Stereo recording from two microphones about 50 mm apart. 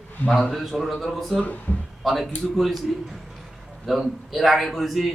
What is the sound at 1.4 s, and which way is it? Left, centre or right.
Speech, left.